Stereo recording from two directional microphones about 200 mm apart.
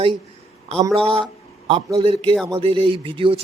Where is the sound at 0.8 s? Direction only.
25° right (ahead or behind).